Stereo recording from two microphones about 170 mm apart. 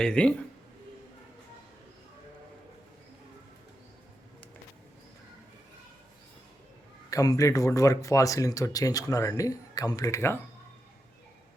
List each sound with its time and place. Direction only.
0.0 s speech: 5° left (ahead or behind)
7.1 s speech: 20° left (ahead or behind)